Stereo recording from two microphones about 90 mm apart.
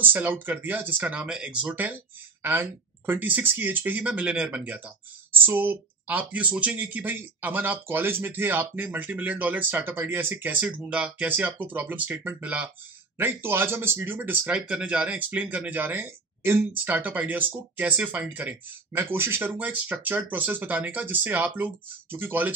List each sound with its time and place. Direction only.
0.0 s speech: 20° right (ahead or behind)